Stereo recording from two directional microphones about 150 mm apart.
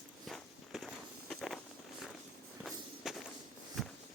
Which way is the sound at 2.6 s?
Centre (ahead or behind).